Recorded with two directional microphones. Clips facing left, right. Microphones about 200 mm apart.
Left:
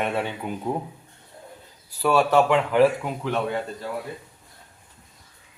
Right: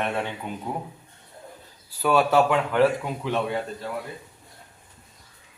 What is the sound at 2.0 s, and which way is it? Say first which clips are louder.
Speech: left 1 dB; centre (ahead or behind).